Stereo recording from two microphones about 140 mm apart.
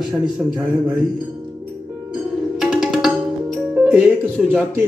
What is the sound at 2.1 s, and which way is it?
Music, centre (ahead or behind).